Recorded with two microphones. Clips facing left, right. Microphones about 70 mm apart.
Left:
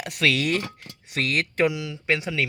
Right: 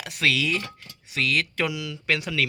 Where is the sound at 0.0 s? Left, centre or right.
Left.